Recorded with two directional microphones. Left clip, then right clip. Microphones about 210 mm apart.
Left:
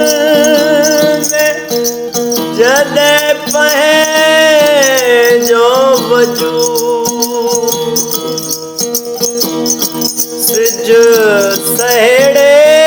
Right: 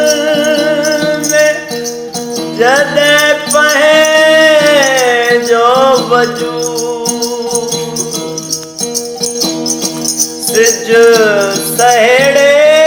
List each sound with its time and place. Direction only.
0.0 s music: 45° left (ahead or behind)
2.6 s music: 45° left (ahead or behind)
10.5 s music: 40° left (ahead or behind)